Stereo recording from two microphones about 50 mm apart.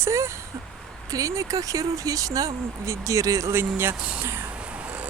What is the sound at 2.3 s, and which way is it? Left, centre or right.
Speech, right.